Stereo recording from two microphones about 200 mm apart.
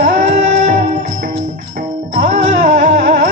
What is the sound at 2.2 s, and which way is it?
Music, 40° right (ahead or behind).